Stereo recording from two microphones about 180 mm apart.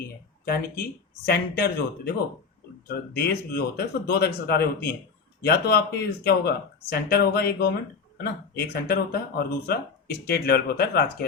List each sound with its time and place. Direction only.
0.4 s speech: 55° left (ahead or behind)